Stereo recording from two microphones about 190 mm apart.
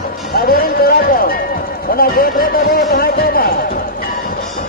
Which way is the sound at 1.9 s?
50° left (ahead or behind).